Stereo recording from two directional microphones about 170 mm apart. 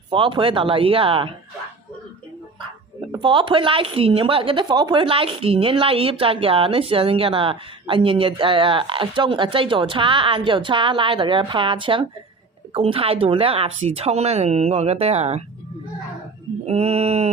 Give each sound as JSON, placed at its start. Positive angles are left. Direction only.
{"t": 0.1, "sound": "speech", "side_deg": -30}
{"t": 3.1, "sound": "speech", "side_deg": -30}
{"t": 16.6, "sound": "speech", "side_deg": -35}